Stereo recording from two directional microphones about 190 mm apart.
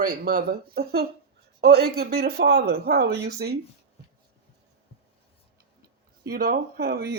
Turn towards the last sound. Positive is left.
turn(degrees=-50)  # may be behind; listen again after turning